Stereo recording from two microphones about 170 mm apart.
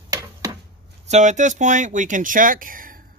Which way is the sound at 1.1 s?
45° right (ahead or behind).